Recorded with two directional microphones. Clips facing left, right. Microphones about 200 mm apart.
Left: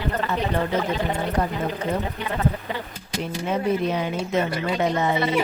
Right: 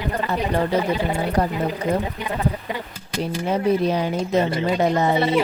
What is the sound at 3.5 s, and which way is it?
Speech, 35° right (ahead or behind).